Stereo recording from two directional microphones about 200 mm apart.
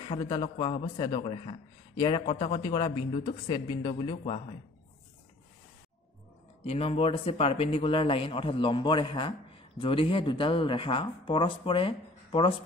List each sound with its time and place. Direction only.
0.0 s speech: 25° left (ahead or behind)
6.6 s speech: 30° left (ahead or behind)